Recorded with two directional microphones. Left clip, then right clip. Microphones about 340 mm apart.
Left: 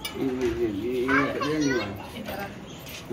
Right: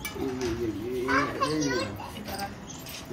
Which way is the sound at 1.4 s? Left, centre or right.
Right.